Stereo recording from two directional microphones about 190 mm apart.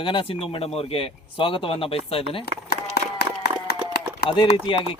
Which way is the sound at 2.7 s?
55° left (ahead or behind).